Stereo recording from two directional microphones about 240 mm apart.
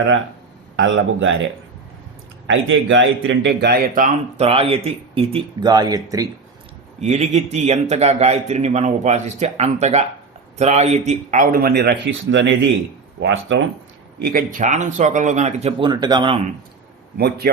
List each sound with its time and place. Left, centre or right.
0.8 s a man's voice: right
2.5 s a man's voice: right; by 6.2 s centre
7.0 s a man's voice: right
17.2 s a man's voice: right